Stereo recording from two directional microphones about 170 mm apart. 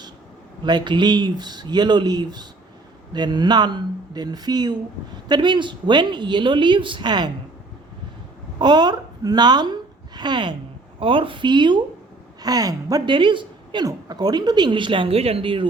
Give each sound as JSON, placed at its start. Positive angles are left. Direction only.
{"t": 0.6, "sound": "a woman's voice", "side_deg": -25}
{"t": 8.5, "sound": "a woman's voice", "side_deg": -25}